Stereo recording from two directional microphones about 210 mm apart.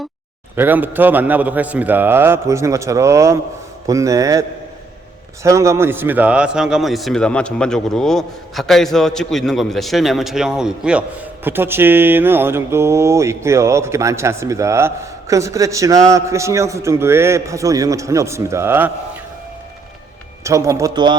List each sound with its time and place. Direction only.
0.5 s a man's voice: 10° right (ahead or behind)
20.4 s a man's voice: 15° right (ahead or behind)